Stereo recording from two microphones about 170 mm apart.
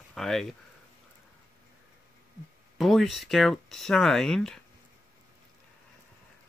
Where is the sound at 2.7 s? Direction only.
Centre (ahead or behind).